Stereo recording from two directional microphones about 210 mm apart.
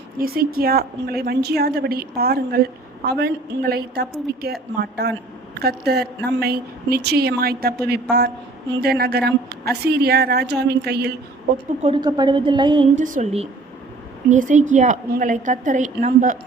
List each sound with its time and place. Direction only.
0.2 s a woman's voice: 45° right (ahead or behind)
11.8 s a woman's voice: 25° right (ahead or behind)
13.0 s a woman's voice: 35° right (ahead or behind)